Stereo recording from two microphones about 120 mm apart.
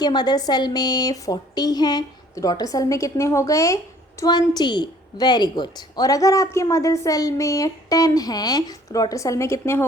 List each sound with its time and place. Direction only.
0.0 s a woman's voice: 35° left (ahead or behind)